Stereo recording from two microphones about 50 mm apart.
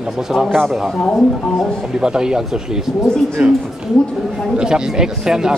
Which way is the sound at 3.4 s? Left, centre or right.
Right.